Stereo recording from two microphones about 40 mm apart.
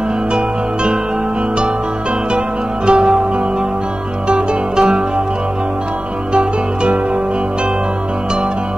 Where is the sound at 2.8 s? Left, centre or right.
Right.